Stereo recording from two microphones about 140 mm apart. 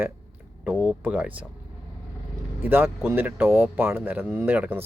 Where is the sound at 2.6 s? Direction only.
15° right (ahead or behind).